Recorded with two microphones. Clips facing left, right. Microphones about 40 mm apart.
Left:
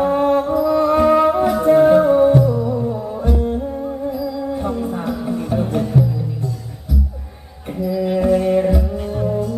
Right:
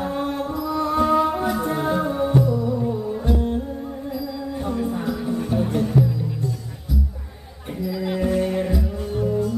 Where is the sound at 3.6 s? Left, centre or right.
Centre.